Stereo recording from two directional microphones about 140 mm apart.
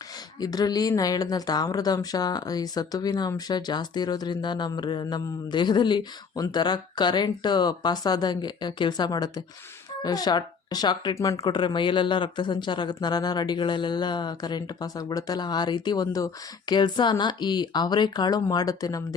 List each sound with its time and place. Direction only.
0.3 s speech: 30° left (ahead or behind)